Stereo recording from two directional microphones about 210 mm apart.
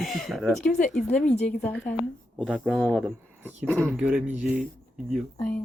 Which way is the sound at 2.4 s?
5° left (ahead or behind).